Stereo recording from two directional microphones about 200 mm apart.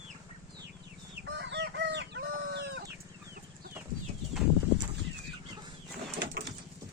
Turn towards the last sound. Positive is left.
turn(degrees=-60)  # may be behind; listen again after turning